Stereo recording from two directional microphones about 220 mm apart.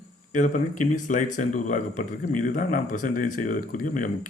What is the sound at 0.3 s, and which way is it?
Speech, 35° left (ahead or behind).